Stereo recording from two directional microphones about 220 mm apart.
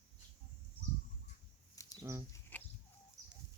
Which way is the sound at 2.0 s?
15° right (ahead or behind).